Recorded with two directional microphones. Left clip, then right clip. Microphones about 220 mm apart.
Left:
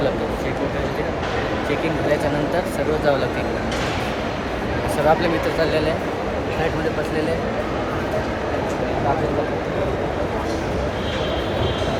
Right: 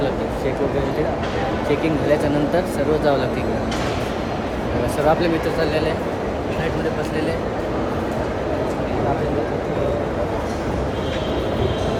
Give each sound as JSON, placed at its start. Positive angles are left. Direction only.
{"t": 5.0, "sound": "speech", "side_deg": -10}